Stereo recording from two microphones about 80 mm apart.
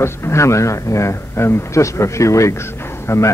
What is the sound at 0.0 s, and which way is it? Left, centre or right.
Speech, left.